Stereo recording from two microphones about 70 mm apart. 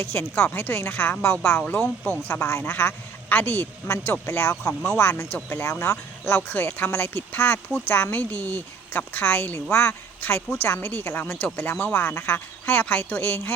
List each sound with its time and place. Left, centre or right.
0.0 s speech: left